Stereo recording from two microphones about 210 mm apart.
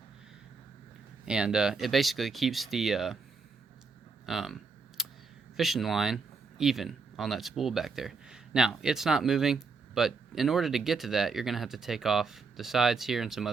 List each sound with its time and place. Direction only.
1.2 s speech: 5° right (ahead or behind)
4.3 s camera: centre (ahead or behind)
5.5 s speech: centre (ahead or behind)